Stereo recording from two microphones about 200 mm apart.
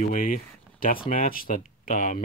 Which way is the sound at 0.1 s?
45° left (ahead or behind).